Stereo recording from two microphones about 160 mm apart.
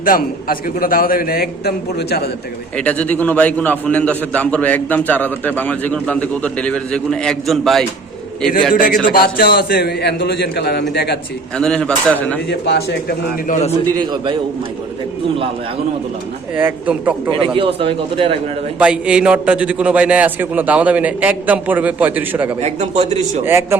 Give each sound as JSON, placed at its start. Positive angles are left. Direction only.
{"t": 0.0, "sound": "a man's voice", "side_deg": 65}
{"t": 2.7, "sound": "a man's voice", "side_deg": 5}
{"t": 8.7, "sound": "a man's voice", "side_deg": 60}
{"t": 11.5, "sound": "speech", "side_deg": 5}
{"t": 12.5, "sound": "speech", "side_deg": 90}
{"t": 13.5, "sound": "a man's voice", "side_deg": 45}
{"t": 14.0, "sound": "a man's voice", "side_deg": -30}
{"t": 16.6, "sound": "a man's voice", "side_deg": -10}
{"t": 17.3, "sound": "a man's voice", "side_deg": -35}
{"t": 18.8, "sound": "a man's voice", "side_deg": -5}
{"t": 22.6, "sound": "a man's voice", "side_deg": -45}
{"t": 23.5, "sound": "a man's voice", "side_deg": -15}